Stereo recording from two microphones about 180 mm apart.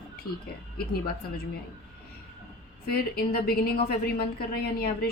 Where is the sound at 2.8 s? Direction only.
60° left (ahead or behind).